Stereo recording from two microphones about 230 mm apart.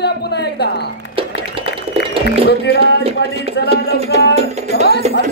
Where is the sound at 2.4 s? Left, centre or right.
Left.